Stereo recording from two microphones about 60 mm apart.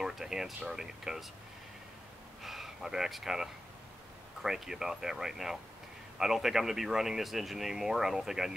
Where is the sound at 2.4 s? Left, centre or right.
Centre.